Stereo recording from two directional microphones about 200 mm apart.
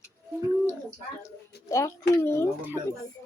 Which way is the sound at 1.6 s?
15° left (ahead or behind).